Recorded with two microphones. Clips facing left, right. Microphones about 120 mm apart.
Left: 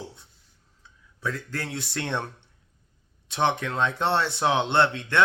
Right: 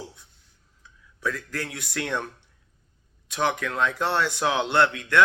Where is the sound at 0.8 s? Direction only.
30° left (ahead or behind).